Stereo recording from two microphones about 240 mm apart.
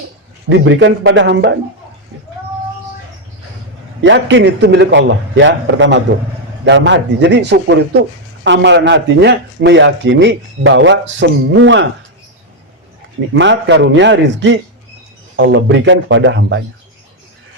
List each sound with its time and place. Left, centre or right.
0.4 s speech: right
4.0 s speech: right
13.3 s speech: right